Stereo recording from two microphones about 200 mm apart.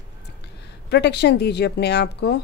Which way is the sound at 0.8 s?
55° left (ahead or behind).